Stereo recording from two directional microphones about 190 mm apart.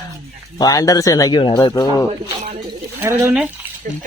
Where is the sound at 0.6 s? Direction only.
20° left (ahead or behind).